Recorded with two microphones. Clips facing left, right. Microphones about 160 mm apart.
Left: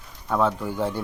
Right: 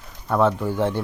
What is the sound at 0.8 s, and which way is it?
Speech, 10° left (ahead or behind).